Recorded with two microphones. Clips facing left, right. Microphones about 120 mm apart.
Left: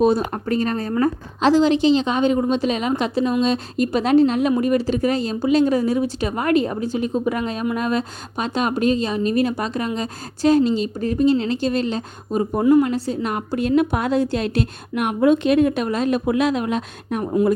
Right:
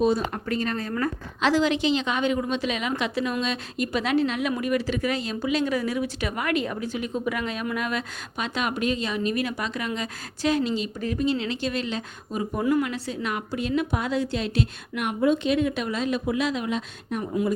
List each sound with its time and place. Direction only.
0.3 s speech: 40° left (ahead or behind); by 17.3 s 55° left (ahead or behind)